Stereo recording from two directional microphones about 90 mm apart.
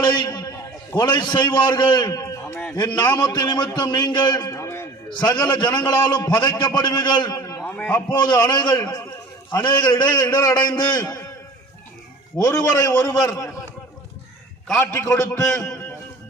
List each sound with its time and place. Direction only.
0.0 s a man's voice: 55° left (ahead or behind)
2.0 s a sound: 40° left (ahead or behind)
2.7 s a man's voice: 50° left (ahead or behind); by 4.9 s 30° left (ahead or behind)
5.1 s a man's voice: 55° left (ahead or behind)
7.3 s a sound: 40° left (ahead or behind)
7.6 s a man's voice: 15° left (ahead or behind)
8.4 s a man's voice: 50° left (ahead or behind)
9.5 s a man's voice: 55° left (ahead or behind)
12.4 s a man's voice: 40° left (ahead or behind)
12.9 s a man's voice: 25° left (ahead or behind)
14.9 s a man's voice: 35° left (ahead or behind)